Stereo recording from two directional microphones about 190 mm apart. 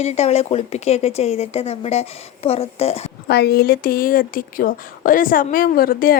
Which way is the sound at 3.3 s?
55° left (ahead or behind).